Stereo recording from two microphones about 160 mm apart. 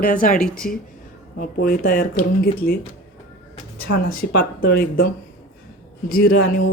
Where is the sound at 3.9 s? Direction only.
75° left (ahead or behind).